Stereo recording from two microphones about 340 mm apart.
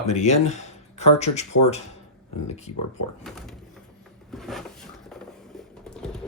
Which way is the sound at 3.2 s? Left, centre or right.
Centre.